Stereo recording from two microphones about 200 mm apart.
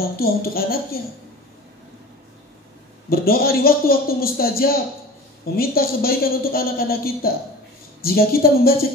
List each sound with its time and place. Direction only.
0.0 s speech: 50° left (ahead or behind)
3.1 s speech: 50° left (ahead or behind)